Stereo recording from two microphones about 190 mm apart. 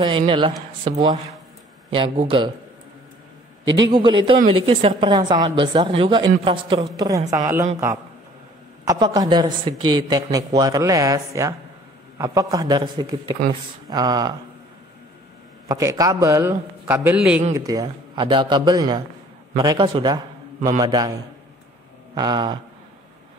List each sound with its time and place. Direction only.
0.0 s a man's voice: 25° right (ahead or behind)
2.0 s a man's voice: 30° right (ahead or behind)
3.6 s a man's voice: 25° right (ahead or behind)
8.8 s a man's voice: 20° right (ahead or behind)
13.8 s a sound: 20° right (ahead or behind)
15.7 s a man's voice: 20° right (ahead or behind)
22.1 s a man's voice: 20° right (ahead or behind)